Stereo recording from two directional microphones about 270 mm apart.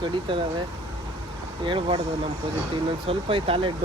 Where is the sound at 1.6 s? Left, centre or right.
Centre.